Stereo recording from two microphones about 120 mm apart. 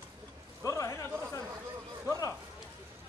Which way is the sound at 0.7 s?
25° left (ahead or behind).